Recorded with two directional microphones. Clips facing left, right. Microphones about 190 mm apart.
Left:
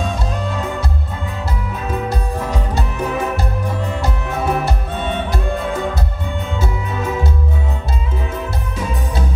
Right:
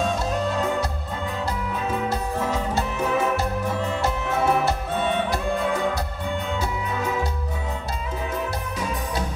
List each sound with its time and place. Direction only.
2.0 s music: 15° left (ahead or behind)